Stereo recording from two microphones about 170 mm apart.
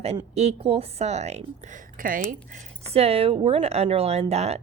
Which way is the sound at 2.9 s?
35° right (ahead or behind).